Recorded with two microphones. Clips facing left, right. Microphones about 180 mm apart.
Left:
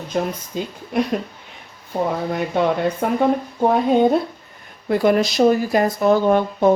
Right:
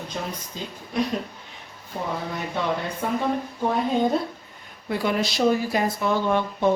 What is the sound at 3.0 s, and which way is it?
Speech, 60° left (ahead or behind).